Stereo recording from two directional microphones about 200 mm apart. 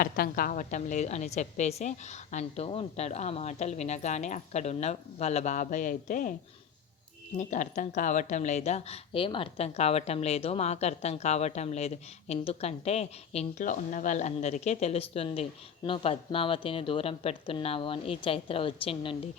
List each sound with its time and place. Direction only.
0.0 s speech: 45° left (ahead or behind)
7.3 s speech: 40° left (ahead or behind)